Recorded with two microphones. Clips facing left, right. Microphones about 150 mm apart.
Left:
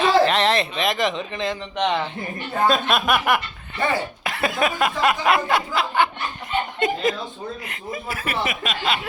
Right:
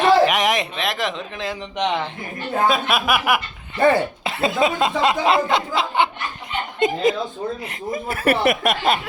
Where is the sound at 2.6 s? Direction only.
5° right (ahead or behind).